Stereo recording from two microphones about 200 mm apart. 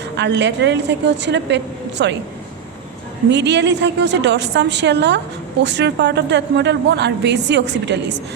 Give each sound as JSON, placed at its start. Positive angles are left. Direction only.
{"t": 0.2, "sound": "a woman's voice", "side_deg": -60}
{"t": 3.2, "sound": "a woman's voice", "side_deg": -60}